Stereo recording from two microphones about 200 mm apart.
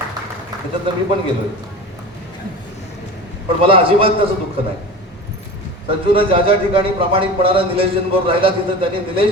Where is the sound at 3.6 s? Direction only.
25° right (ahead or behind).